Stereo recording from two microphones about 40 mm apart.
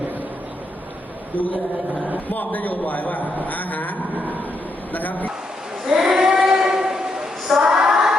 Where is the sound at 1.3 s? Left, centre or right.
Left.